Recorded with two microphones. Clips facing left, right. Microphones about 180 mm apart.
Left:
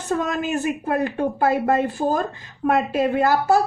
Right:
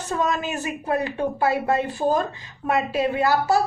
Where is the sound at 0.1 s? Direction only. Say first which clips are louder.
Left 2 dB; 50° left (ahead or behind).